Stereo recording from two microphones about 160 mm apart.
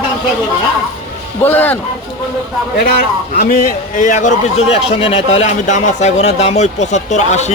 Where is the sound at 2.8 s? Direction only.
70° left (ahead or behind); by 7.5 s 45° left (ahead or behind).